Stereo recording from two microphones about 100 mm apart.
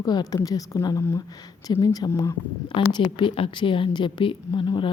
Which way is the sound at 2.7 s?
60° left (ahead or behind).